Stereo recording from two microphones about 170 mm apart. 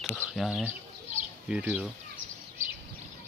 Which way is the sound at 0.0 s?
Centre (ahead or behind).